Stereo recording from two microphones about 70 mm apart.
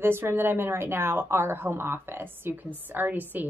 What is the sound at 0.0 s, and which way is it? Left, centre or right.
A woman's voice, right.